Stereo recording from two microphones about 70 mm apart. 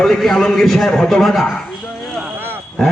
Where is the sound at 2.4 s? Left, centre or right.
Right.